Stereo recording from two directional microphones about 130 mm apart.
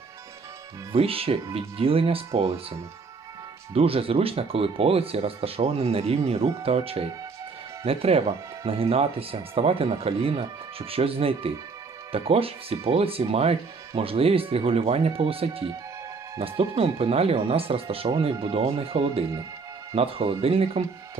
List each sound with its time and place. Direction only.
0.9 s speech: 45° right (ahead or behind)
3.8 s speech: 45° right (ahead or behind)